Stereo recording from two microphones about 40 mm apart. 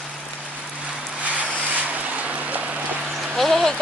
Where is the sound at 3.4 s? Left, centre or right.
Centre.